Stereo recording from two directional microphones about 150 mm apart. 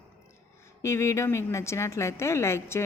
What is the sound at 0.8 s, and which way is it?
Speech, 20° left (ahead or behind).